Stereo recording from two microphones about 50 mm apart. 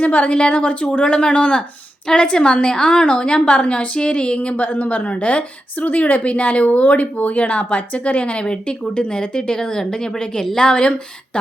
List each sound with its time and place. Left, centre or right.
0.0 s a woman's voice: left